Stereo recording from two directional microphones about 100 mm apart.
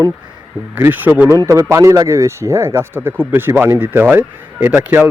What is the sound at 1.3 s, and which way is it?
Speech, 35° right (ahead or behind).